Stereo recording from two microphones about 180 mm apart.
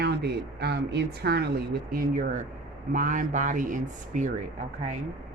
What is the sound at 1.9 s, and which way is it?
Speech, 55° right (ahead or behind).